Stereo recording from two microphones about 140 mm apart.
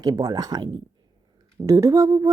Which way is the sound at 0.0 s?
25° right (ahead or behind).